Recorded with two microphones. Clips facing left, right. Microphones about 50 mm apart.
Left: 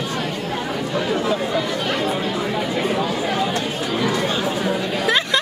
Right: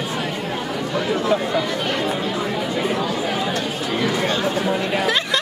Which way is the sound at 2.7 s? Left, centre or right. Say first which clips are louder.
Even; centre.